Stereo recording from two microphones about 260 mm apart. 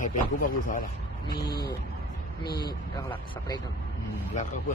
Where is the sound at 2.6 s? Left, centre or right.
Centre.